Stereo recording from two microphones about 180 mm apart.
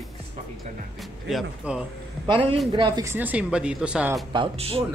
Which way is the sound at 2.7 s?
25° right (ahead or behind).